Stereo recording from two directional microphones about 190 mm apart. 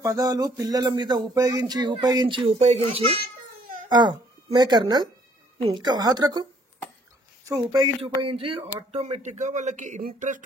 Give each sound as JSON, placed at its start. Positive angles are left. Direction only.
{"t": 0.0, "sound": "speech", "side_deg": -20}
{"t": 7.4, "sound": "speech", "side_deg": -20}